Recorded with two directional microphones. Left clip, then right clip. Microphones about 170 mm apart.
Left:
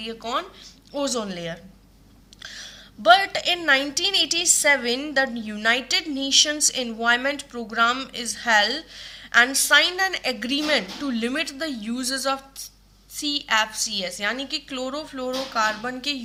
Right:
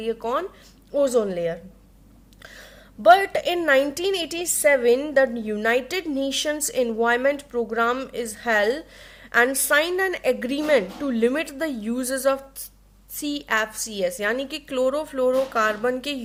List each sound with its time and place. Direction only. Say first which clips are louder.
0.0 s a woman's voice: right 3 dB; 45° right (ahead or behind)